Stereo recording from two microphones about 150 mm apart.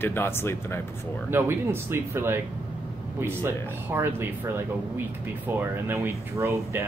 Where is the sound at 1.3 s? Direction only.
15° right (ahead or behind).